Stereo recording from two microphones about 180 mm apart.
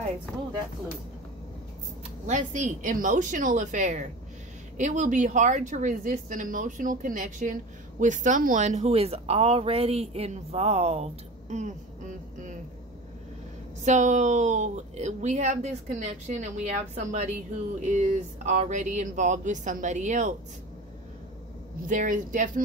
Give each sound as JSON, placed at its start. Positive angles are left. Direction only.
{"t": 2.2, "sound": "a woman's voice", "side_deg": -45}
{"t": 13.8, "sound": "a woman's voice", "side_deg": -40}
{"t": 21.8, "sound": "a woman's voice", "side_deg": -45}